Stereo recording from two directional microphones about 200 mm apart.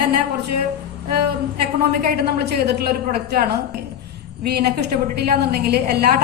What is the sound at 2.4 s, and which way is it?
A woman's voice, 55° right (ahead or behind).